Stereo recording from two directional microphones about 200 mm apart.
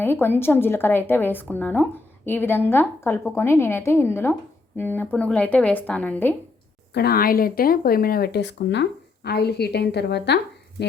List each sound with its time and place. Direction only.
0.0 s speech: 10° left (ahead or behind)
6.9 s speech: 50° left (ahead or behind)